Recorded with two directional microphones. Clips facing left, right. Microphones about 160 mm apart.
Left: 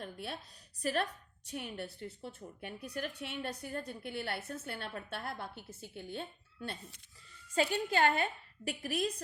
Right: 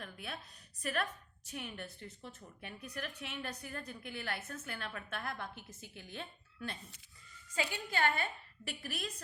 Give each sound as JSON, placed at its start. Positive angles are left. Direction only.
{"t": 0.0, "sound": "a sound", "side_deg": 35}
{"t": 0.8, "sound": "a woman's voice", "side_deg": 35}
{"t": 7.5, "sound": "a woman's voice", "side_deg": 45}